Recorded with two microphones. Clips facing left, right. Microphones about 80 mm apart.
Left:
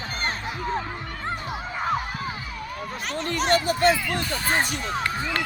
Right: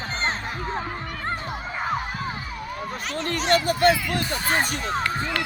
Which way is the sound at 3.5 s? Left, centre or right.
Right.